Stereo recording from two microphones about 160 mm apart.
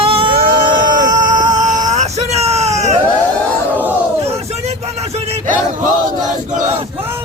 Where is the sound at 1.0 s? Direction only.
25° right (ahead or behind).